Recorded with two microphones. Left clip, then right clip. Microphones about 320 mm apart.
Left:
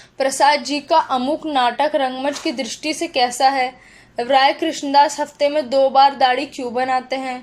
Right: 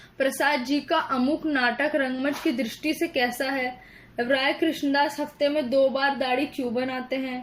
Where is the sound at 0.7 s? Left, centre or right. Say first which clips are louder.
Left 8 dB; left.